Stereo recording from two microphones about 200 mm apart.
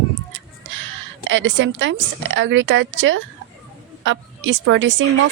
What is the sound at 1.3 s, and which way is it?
A woman's voice, 65° right (ahead or behind).